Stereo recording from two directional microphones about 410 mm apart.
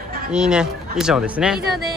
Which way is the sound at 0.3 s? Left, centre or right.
Centre.